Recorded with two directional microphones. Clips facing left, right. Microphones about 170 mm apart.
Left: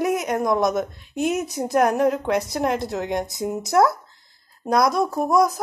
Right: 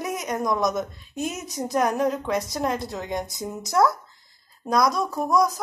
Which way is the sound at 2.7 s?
20° left (ahead or behind).